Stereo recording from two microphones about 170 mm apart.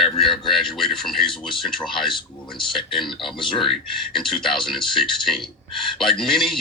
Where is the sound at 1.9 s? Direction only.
30° left (ahead or behind).